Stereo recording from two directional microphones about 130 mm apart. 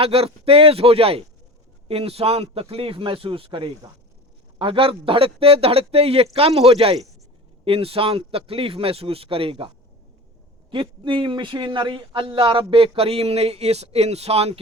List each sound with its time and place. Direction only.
0.0 s a man's voice: 50° right (ahead or behind)